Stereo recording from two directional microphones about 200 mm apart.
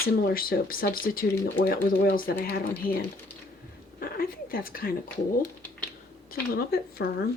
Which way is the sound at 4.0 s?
45° left (ahead or behind).